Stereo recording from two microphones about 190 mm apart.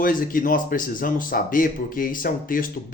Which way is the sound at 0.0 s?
45° left (ahead or behind).